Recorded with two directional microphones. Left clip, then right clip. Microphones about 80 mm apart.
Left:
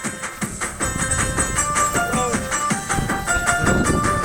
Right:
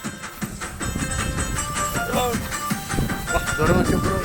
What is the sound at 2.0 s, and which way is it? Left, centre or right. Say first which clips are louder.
Music: left 2 dB; left.